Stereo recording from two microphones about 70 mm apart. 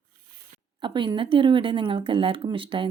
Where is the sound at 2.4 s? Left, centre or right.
Right.